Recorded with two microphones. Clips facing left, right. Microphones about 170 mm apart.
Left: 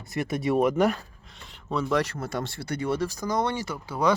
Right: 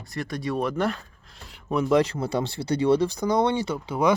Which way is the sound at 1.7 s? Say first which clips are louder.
Right 5 dB; 15° right (ahead or behind).